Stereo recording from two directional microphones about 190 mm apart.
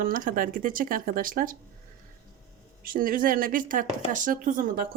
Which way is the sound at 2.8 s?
50° right (ahead or behind).